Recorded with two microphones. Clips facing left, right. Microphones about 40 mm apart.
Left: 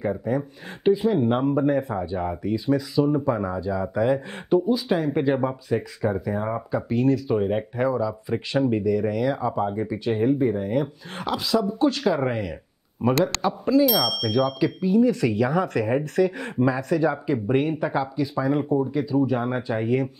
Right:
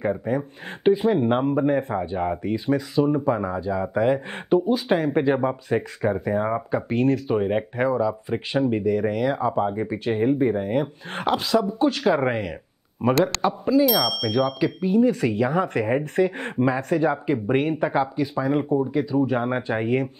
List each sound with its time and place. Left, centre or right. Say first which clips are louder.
0.3 s speech: even; right
5.1 s speech: right 2 dB; right
5.7 s speech: right 1 dB; right
13.3 s speech: even; centre
14.6 s speech: even; right
17.8 s speech: right 3 dB; right
18.1 s speech: right 1 dB; right